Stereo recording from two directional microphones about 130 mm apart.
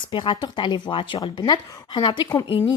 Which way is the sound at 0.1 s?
40° left (ahead or behind).